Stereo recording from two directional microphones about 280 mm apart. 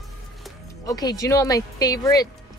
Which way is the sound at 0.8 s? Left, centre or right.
Centre.